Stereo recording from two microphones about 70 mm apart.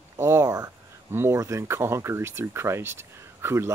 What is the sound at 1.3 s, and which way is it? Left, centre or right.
Speech, right.